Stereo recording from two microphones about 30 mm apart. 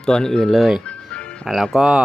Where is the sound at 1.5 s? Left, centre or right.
Centre.